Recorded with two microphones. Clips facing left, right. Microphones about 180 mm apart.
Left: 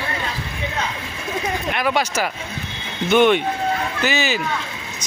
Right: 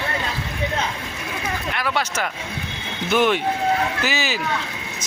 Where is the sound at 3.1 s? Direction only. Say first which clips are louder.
Left 4 dB; centre (ahead or behind).